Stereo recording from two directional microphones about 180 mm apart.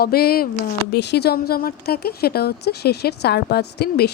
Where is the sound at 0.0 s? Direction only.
60° left (ahead or behind).